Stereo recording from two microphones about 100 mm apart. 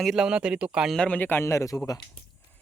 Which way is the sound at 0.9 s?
15° left (ahead or behind).